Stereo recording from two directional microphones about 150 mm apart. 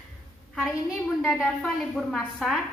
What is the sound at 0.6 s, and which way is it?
A woman's voice, centre (ahead or behind).